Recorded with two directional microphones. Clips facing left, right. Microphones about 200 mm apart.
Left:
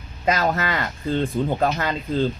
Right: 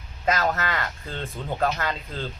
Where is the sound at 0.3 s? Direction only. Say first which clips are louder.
Left 3 dB; 15° left (ahead or behind).